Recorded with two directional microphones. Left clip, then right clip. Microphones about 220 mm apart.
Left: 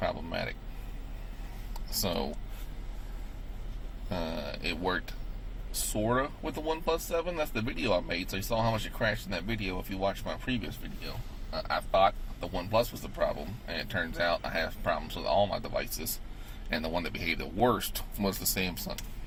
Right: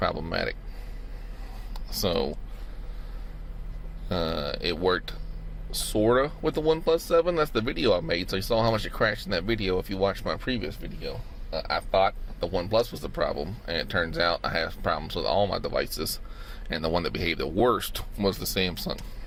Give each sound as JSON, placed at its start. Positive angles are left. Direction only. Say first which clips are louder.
{"t": 0.0, "sound": "speech", "louder": "right 5 dB", "side_deg": -50}
{"t": 1.7, "sound": "speech", "louder": "right 6 dB", "side_deg": -30}
{"t": 4.1, "sound": "speech", "louder": "right 7 dB", "side_deg": -35}
{"t": 5.9, "sound": "speech", "louder": "right 7 dB", "side_deg": -45}
{"t": 11.9, "sound": "speech", "louder": "right 1 dB", "side_deg": -45}
{"t": 16.7, "sound": "speech", "louder": "right 5 dB", "side_deg": -40}